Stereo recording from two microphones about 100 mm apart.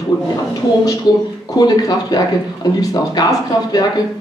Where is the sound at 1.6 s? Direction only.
40° left (ahead or behind).